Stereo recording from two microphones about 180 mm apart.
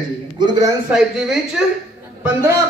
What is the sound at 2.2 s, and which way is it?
Speech, 15° right (ahead or behind).